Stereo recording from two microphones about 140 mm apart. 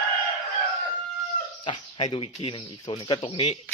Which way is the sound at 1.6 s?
35° left (ahead or behind).